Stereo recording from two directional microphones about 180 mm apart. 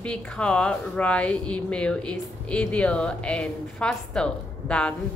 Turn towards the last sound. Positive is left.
turn(degrees=5)  # may be behind; listen again after turning